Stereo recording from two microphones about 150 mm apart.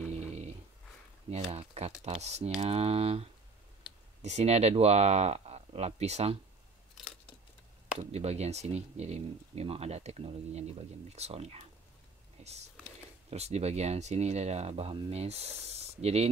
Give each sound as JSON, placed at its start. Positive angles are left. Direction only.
{"t": 0.0, "sound": "dog", "side_deg": -45}
{"t": 1.5, "sound": "speech", "side_deg": -45}
{"t": 8.0, "sound": "speech", "side_deg": -45}